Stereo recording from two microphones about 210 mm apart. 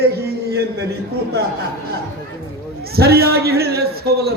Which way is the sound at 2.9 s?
50° right (ahead or behind).